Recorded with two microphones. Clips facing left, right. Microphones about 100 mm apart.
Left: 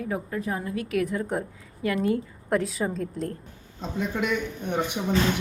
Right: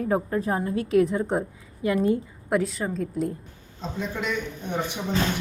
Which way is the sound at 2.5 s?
Centre (ahead or behind).